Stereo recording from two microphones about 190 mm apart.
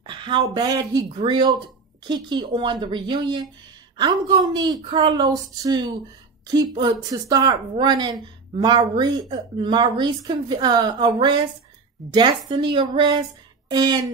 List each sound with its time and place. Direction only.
0.0 s a woman's voice: 25° right (ahead or behind)